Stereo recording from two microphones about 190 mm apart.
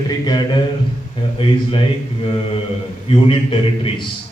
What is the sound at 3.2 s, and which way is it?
Speech, 30° left (ahead or behind).